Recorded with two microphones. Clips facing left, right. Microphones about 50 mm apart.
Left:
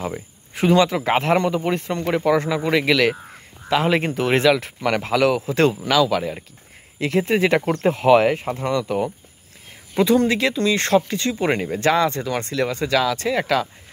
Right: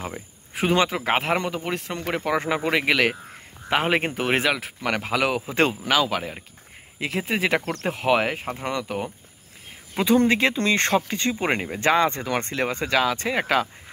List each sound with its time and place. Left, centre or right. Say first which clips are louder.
0.0 s a sound: left 5 dB; centre
0.8 s speech: left 4 dB; centre
7.0 s speech: left 6 dB; centre
7.6 s speech: left 8 dB; centre
7.9 s speech: left 6 dB; centre
9.9 s speech: left 2 dB; right